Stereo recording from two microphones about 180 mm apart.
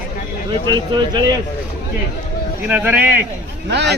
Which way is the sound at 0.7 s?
25° right (ahead or behind).